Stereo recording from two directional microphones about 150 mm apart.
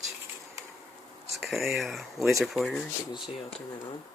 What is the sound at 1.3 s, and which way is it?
Speech, centre (ahead or behind).